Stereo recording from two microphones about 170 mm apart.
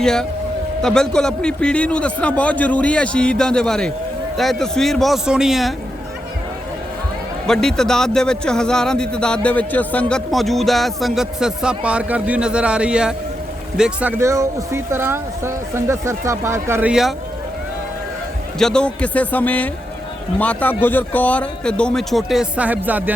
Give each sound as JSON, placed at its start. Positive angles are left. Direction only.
{"t": 0.0, "sound": "a man's voice", "side_deg": 5}
{"t": 7.4, "sound": "a man's voice", "side_deg": 5}
{"t": 14.2, "sound": "speech", "side_deg": -15}
{"t": 16.9, "sound": "a man's voice", "side_deg": 0}
{"t": 18.6, "sound": "a man's voice", "side_deg": 5}